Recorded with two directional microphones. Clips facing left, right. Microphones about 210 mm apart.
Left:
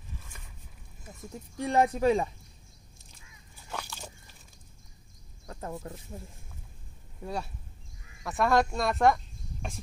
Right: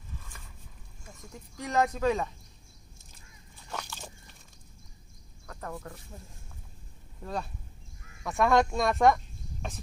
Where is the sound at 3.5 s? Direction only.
5° left (ahead or behind).